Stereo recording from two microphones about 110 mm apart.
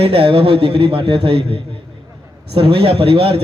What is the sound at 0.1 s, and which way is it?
A man's voice, 55° right (ahead or behind).